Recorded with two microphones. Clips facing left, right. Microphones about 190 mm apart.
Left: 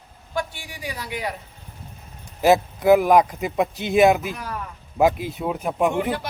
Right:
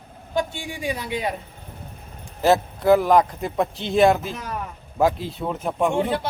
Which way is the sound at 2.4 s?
15° left (ahead or behind).